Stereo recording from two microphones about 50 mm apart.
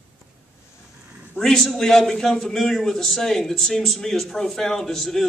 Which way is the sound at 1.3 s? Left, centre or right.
Centre.